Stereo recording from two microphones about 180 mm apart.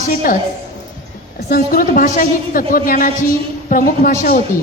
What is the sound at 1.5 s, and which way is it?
A woman's voice, 55° left (ahead or behind).